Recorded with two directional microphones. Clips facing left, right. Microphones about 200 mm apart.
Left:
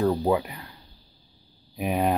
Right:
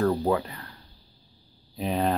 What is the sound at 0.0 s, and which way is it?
Speech, 15° left (ahead or behind).